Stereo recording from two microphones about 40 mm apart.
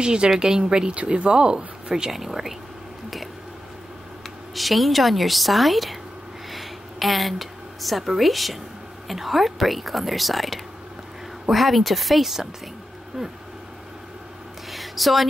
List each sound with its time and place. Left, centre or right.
0.0 s speech: right
2.1 s speech: centre
4.6 s a woman's voice: centre
14.7 s a sound: centre